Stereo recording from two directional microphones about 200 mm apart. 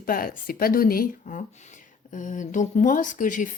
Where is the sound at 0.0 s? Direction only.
45° left (ahead or behind).